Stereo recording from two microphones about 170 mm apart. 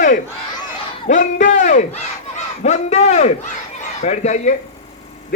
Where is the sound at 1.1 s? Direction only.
45° left (ahead or behind).